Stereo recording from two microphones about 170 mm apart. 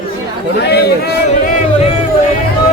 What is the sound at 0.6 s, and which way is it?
Speech, 70° left (ahead or behind).